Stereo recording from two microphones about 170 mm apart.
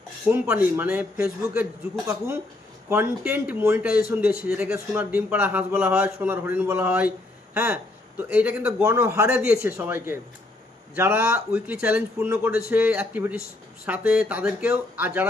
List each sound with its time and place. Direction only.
0.3 s a man's voice: 10° right (ahead or behind)